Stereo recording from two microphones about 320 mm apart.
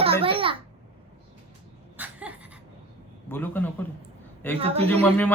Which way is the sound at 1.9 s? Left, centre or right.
Centre.